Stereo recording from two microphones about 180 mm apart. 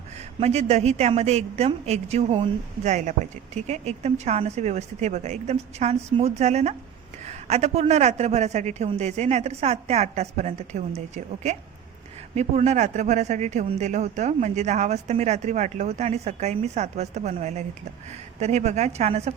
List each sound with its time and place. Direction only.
0.3 s a woman's voice: 35° right (ahead or behind)